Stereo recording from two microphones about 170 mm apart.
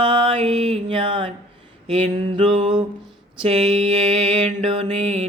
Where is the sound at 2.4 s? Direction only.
30° right (ahead or behind).